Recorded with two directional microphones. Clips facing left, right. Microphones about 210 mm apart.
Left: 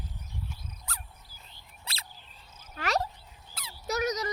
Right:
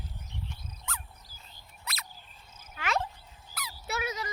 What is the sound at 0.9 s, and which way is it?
Cricket, 35° left (ahead or behind).